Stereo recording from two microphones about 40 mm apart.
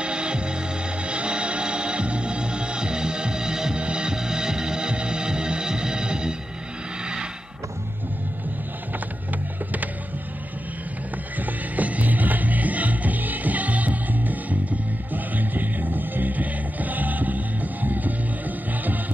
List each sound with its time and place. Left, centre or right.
0.0 s music: right
11.3 s music: right